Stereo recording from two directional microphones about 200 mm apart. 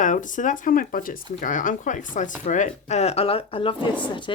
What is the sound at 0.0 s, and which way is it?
Speech, 40° left (ahead or behind).